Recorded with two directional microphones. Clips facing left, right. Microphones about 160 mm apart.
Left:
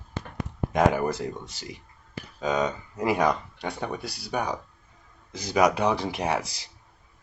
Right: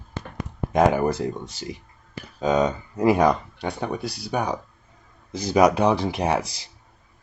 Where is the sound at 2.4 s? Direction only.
30° right (ahead or behind).